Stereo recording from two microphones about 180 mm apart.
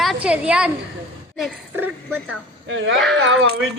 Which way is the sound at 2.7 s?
90° right.